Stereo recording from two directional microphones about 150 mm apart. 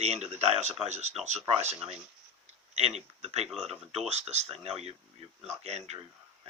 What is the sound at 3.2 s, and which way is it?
Speech, 45° right (ahead or behind).